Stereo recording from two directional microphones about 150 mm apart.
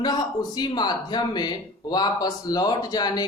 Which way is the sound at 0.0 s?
30° left (ahead or behind).